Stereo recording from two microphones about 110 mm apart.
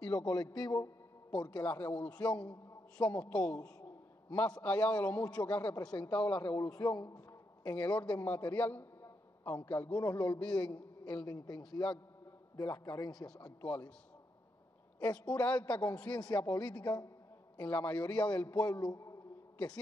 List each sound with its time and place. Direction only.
0.1 s a man's voice: 35° left (ahead or behind)
1.6 s a man's voice: 15° left (ahead or behind)
5.9 s a man's voice: 45° left (ahead or behind)
7.7 s a man's voice: 15° left (ahead or behind)
11.2 s a man's voice: 35° left (ahead or behind)
13.6 s a man's voice: 15° left (ahead or behind)
15.0 s a man's voice: 10° left (ahead or behind)
16.0 s a man's voice: 40° left (ahead or behind)
17.6 s a man's voice: 15° left (ahead or behind)